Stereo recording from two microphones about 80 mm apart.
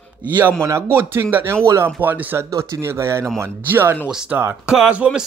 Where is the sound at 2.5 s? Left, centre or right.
Right.